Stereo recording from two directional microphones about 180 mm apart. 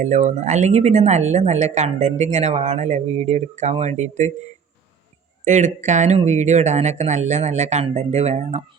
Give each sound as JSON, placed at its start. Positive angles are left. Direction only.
{"t": 0.0, "sound": "speech", "side_deg": -40}
{"t": 5.5, "sound": "speech", "side_deg": -40}